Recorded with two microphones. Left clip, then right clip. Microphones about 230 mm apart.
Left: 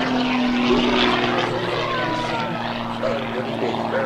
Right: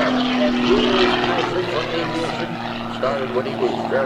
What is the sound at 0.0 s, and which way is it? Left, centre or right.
Vehicle, centre.